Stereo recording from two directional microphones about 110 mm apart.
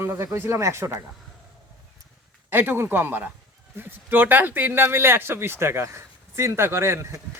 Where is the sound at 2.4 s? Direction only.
20° right (ahead or behind).